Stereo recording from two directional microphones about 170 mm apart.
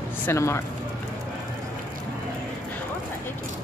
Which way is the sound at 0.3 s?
15° left (ahead or behind).